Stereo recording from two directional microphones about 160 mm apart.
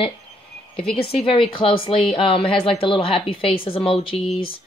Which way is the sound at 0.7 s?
5° left (ahead or behind).